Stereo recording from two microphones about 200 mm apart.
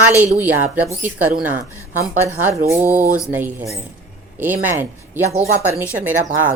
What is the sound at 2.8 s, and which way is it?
Speech, 10° right (ahead or behind).